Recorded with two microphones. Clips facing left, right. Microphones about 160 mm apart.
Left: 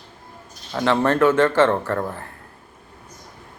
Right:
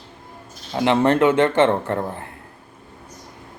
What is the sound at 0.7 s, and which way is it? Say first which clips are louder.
Speech: right 2 dB; 20° right (ahead or behind).